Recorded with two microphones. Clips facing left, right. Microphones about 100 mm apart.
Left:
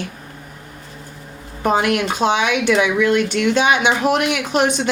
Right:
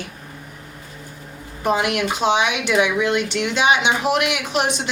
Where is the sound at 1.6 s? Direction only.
45° left (ahead or behind).